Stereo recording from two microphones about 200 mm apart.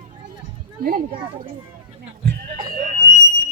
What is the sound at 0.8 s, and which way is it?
Speech, 50° right (ahead or behind).